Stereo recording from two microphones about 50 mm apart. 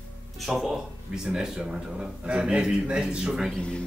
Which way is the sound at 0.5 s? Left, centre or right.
Centre.